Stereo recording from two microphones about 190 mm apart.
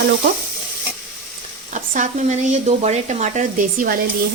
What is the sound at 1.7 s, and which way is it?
Speech, 40° right (ahead or behind).